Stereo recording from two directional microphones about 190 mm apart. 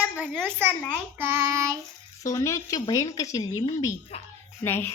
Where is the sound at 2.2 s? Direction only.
15° left (ahead or behind).